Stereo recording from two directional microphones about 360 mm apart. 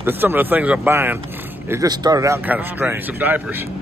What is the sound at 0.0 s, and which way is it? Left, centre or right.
A man's voice, centre.